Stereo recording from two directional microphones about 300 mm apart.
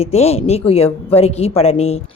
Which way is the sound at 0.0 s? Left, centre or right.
Left.